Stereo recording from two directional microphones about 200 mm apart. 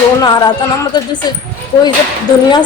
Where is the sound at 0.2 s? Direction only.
20° left (ahead or behind).